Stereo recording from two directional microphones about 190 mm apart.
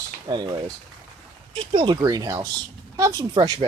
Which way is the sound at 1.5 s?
25° right (ahead or behind).